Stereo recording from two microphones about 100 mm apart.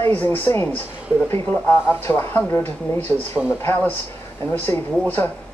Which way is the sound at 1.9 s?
25° left (ahead or behind).